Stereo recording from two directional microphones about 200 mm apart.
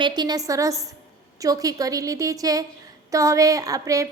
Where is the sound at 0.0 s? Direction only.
20° right (ahead or behind).